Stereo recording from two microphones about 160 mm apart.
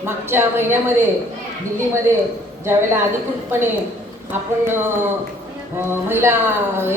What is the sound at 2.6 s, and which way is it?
Speech, 15° right (ahead or behind).